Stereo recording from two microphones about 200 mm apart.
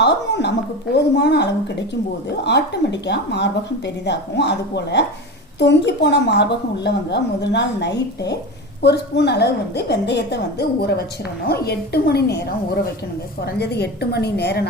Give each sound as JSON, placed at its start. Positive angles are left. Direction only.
{"t": 0.0, "sound": "a sound", "side_deg": 60}
{"t": 0.9, "sound": "a woman's voice", "side_deg": 55}
{"t": 13.4, "sound": "a woman's voice", "side_deg": 55}